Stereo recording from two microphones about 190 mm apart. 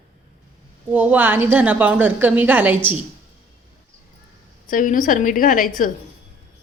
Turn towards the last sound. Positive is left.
turn(degrees=45)  # may be behind; listen again after turning